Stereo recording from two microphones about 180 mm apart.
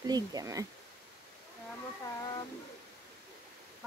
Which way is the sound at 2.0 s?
20° left (ahead or behind).